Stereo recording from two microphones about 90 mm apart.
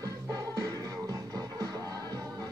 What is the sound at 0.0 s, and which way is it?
Music, 40° right (ahead or behind).